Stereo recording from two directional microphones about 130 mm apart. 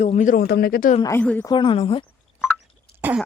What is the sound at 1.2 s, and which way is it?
Speech, 10° left (ahead or behind).